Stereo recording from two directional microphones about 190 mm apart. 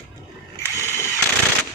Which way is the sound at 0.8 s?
15° left (ahead or behind).